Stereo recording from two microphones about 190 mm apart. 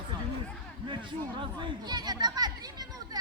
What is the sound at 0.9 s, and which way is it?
Speech, 25° right (ahead or behind).